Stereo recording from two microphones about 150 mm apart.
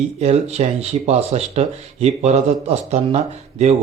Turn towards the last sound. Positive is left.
turn(degrees=-45)  # may be behind; listen again after turning